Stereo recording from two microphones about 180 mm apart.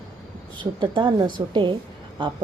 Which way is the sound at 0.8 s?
25° right (ahead or behind).